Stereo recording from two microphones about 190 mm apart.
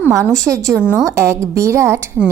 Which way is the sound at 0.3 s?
15° right (ahead or behind).